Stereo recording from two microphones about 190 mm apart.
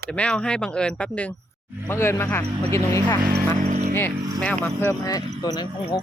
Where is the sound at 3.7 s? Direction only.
40° right (ahead or behind).